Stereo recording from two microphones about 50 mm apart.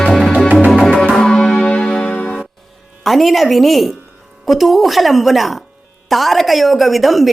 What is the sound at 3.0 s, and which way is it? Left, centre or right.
A woman's voice, centre.